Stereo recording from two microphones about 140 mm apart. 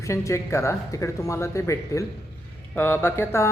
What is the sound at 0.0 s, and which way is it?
Speech, 20° left (ahead or behind).